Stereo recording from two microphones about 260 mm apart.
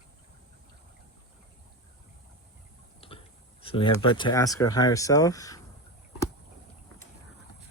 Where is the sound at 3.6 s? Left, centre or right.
Centre.